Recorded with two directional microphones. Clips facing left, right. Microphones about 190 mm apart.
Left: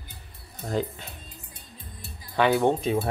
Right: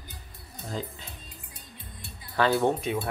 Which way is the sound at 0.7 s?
65° left (ahead or behind).